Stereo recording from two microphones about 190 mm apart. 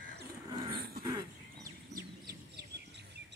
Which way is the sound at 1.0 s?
20° right (ahead or behind).